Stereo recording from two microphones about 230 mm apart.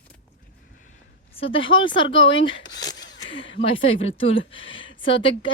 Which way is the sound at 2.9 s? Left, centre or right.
Centre.